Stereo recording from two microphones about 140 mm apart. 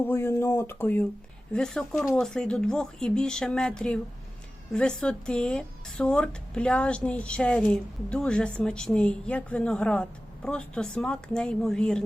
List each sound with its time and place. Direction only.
0.0 s speech: 15° left (ahead or behind)